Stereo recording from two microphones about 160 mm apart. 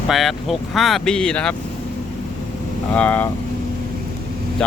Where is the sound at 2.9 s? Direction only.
10° left (ahead or behind).